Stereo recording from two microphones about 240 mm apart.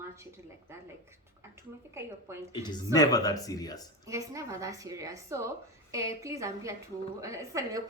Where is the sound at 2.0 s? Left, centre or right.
Centre.